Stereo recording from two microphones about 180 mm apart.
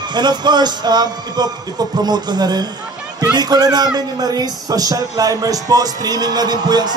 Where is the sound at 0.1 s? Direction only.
25° right (ahead or behind).